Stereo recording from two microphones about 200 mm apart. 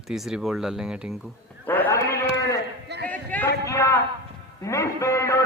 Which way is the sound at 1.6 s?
10° left (ahead or behind).